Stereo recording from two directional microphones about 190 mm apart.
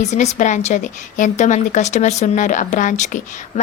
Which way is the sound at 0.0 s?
35° left (ahead or behind).